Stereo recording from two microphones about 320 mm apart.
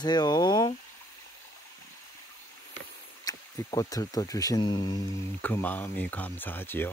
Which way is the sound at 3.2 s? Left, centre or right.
Centre.